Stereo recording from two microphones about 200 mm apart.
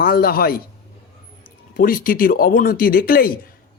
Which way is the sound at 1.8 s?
45° left (ahead or behind).